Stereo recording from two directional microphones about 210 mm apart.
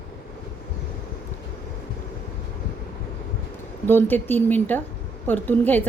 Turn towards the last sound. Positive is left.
turn(degrees=10)  # may be behind; listen again after turning